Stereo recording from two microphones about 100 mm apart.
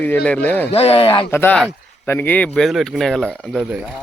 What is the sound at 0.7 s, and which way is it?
Speech, 90° left.